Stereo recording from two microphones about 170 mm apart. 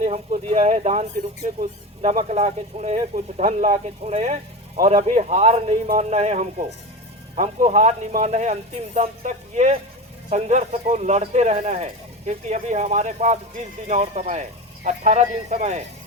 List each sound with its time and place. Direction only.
0.0 s speech: 40° right (ahead or behind)